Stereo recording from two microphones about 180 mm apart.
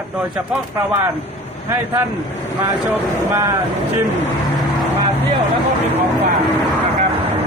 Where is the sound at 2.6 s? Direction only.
10° right (ahead or behind).